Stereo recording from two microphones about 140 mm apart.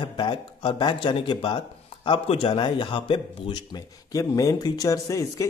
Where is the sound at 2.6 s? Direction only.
35° left (ahead or behind).